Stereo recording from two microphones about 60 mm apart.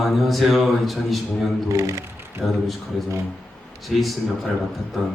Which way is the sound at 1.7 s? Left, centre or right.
Right.